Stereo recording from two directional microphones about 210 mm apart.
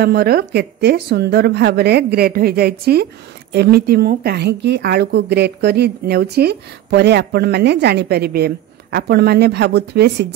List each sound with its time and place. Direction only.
0.0 s speech: 50° right (ahead or behind)